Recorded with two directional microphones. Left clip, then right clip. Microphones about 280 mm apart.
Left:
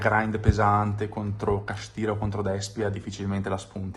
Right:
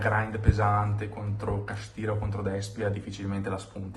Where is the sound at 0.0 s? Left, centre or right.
Centre.